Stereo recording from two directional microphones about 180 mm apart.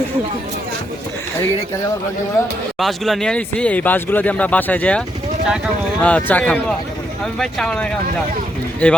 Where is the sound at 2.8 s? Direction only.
Centre (ahead or behind).